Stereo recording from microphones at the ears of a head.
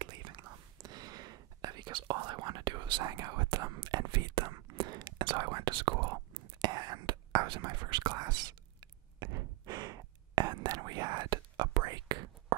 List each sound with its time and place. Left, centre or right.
0.0 s whispering: right